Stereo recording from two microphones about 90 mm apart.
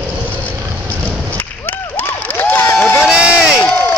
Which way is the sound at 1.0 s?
20° left (ahead or behind).